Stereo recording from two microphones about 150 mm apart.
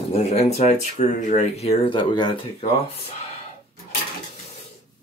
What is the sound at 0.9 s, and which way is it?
Speech, 60° left (ahead or behind).